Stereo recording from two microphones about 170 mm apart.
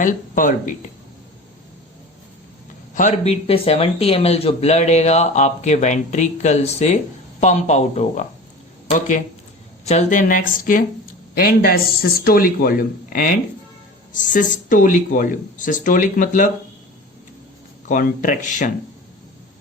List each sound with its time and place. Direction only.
0.0 s speech: 50° left (ahead or behind)
2.9 s a man's voice: 45° left (ahead or behind)
14.2 s speech: 50° left (ahead or behind)
17.8 s speech: 50° left (ahead or behind)